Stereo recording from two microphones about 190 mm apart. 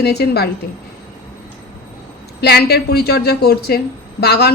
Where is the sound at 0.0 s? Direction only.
60° left (ahead or behind).